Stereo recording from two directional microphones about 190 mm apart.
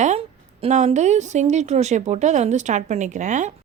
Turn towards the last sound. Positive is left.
turn(degrees=-40)  # may be behind; listen again after turning